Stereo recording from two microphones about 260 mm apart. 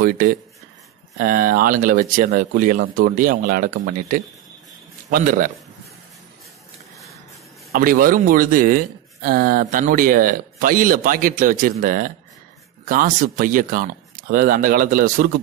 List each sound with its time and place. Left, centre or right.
0.0 s speech: right
7.7 s speech: right